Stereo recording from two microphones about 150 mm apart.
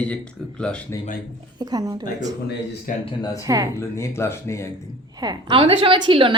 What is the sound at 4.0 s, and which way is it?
Speech, 20° left (ahead or behind).